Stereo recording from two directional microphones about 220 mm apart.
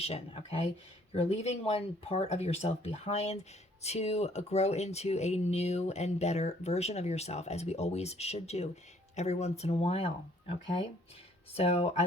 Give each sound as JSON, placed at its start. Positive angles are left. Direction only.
{"t": 0.0, "sound": "speech", "side_deg": 25}
{"t": 11.5, "sound": "speech", "side_deg": 30}